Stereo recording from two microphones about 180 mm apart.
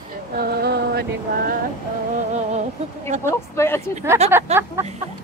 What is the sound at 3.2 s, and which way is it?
Speech, 15° left (ahead or behind).